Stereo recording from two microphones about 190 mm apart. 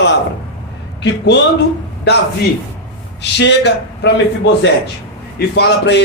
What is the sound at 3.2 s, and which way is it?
Speech, 65° left (ahead or behind).